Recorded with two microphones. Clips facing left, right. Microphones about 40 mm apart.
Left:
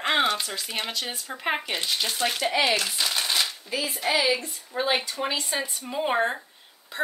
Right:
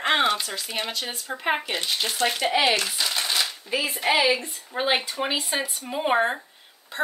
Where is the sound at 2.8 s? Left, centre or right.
Centre.